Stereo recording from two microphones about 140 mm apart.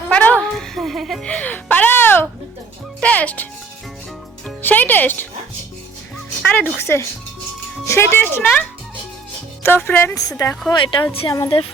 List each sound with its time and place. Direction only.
0.1 s a sound: 10° left (ahead or behind)
0.5 s music: centre (ahead or behind)
3.0 s speech: 10° left (ahead or behind)
4.6 s music: 10° left (ahead or behind)
6.1 s speech: 5° left (ahead or behind)
9.6 s speech: 15° left (ahead or behind)
10.7 s speech: 35° left (ahead or behind)